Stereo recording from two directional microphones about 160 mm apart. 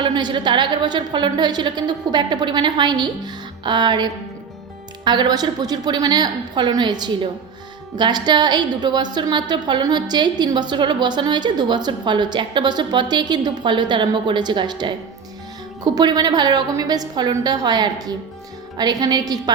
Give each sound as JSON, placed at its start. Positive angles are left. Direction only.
{"t": 0.0, "sound": "a woman's voice", "side_deg": -30}